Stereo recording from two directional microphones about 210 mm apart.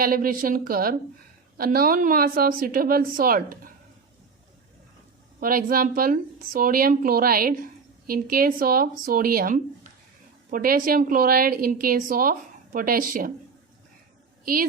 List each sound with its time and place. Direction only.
0.0 s a woman's voice: 40° right (ahead or behind)
5.4 s a woman's voice: 40° right (ahead or behind)
14.4 s a woman's voice: 45° right (ahead or behind)